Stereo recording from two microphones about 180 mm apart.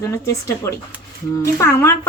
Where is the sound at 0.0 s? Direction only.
15° left (ahead or behind).